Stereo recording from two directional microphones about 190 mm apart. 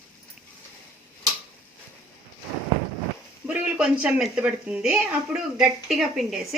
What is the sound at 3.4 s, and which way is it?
Speech, 5° right (ahead or behind).